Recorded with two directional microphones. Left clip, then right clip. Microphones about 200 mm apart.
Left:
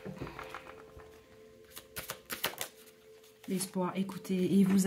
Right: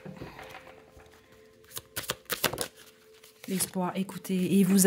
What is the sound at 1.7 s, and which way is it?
Shuffling cards, 35° right (ahead or behind).